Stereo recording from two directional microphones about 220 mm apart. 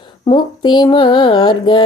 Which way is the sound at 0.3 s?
20° left (ahead or behind).